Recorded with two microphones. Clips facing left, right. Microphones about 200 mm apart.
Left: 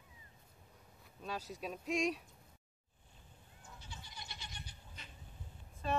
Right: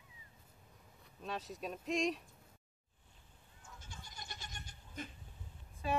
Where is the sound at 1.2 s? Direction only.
Centre (ahead or behind).